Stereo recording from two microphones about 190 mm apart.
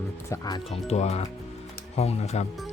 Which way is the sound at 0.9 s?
35° left (ahead or behind).